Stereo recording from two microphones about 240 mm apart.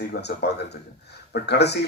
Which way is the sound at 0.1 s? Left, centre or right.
Left.